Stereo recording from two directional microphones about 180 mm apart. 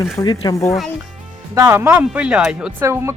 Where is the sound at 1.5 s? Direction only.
15° right (ahead or behind).